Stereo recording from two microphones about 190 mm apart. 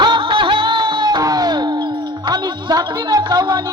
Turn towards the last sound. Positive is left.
turn(degrees=-20)  # may be behind; listen again after turning